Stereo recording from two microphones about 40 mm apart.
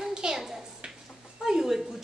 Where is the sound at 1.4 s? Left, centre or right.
Centre.